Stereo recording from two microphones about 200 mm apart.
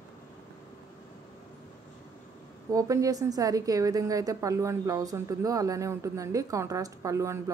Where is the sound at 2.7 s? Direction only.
15° right (ahead or behind).